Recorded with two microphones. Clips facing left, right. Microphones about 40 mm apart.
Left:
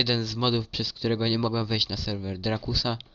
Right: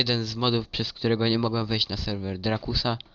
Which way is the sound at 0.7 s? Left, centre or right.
Right.